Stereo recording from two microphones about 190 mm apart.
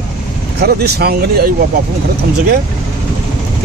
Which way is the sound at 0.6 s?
60° right (ahead or behind).